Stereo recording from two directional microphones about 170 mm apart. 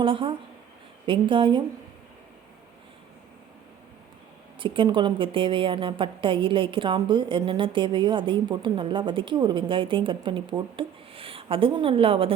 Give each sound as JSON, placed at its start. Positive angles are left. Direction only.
{"t": 0.0, "sound": "a woman's voice", "side_deg": -30}
{"t": 4.6, "sound": "a woman's voice", "side_deg": -30}